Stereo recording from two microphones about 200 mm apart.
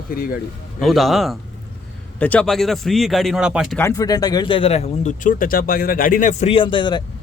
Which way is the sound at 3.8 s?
15° left (ahead or behind).